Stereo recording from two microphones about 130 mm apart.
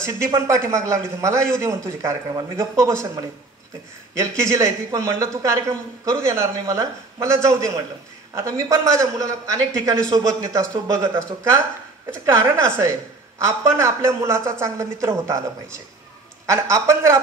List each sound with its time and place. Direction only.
0.0 s a man's voice: 20° right (ahead or behind)